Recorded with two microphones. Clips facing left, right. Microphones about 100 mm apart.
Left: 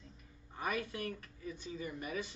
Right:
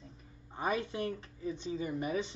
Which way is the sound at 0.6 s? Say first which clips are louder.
Right 5 dB; 25° right (ahead or behind).